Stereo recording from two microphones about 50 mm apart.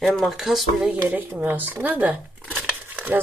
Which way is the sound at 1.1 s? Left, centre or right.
Right.